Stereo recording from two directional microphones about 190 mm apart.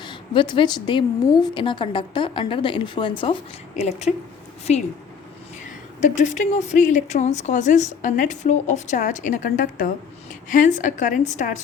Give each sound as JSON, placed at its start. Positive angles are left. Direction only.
{"t": 0.0, "sound": "a woman's voice", "side_deg": 25}
{"t": 6.0, "sound": "speech", "side_deg": 40}